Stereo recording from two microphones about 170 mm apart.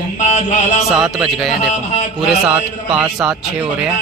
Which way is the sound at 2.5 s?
5° right (ahead or behind).